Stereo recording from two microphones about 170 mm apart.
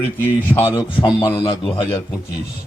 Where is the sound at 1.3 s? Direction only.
30° left (ahead or behind).